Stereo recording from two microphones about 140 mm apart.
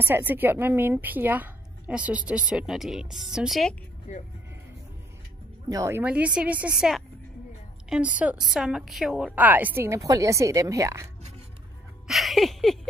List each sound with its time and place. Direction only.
0.0 s a woman's voice: 15° right (ahead or behind)
4.1 s speech: 60° left (ahead or behind)
5.7 s a woman's voice: 20° right (ahead or behind)
8.2 s a woman's voice: 5° right (ahead or behind); by 11.1 s 20° right (ahead or behind)
12.1 s music: centre (ahead or behind)